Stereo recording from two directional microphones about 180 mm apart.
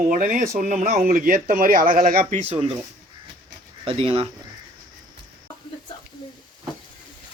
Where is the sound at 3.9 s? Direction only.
30° right (ahead or behind).